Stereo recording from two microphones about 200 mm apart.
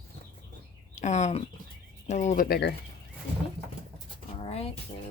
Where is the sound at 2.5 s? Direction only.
55° left (ahead or behind).